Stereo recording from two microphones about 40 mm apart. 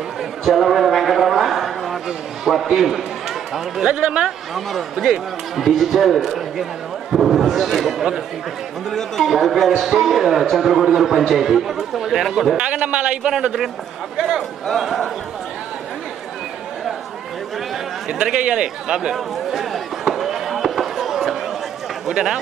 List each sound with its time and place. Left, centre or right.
0.5 s a sound: centre
2.5 s speech: centre
3.9 s a man's voice: right
4.6 s speech: centre
8.9 s speech: centre
12.8 s a man's voice: right
14.7 s speech: centre
18.5 s a man's voice: right
19.1 s fireworks: centre
22.1 s speech: centre